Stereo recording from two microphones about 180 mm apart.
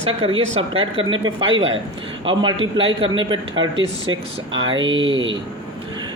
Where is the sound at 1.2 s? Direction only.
90° right.